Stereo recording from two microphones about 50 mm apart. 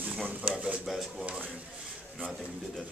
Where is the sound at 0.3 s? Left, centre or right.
Right.